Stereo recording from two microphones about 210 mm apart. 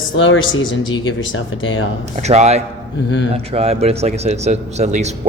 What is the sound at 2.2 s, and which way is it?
A man's voice, 30° right (ahead or behind).